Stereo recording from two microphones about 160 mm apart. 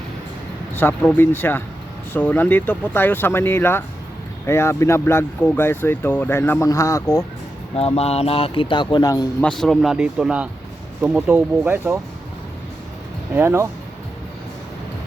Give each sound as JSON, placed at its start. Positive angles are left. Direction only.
{"t": 0.8, "sound": "speech", "side_deg": 10}
{"t": 7.8, "sound": "speech", "side_deg": 40}
{"t": 9.4, "sound": "speech", "side_deg": 5}
{"t": 13.3, "sound": "speech", "side_deg": -15}